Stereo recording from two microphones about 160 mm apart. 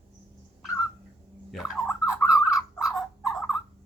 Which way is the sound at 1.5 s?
Centre (ahead or behind).